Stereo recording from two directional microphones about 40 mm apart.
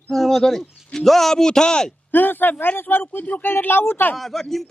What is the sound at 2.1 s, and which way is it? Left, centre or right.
Speech, left.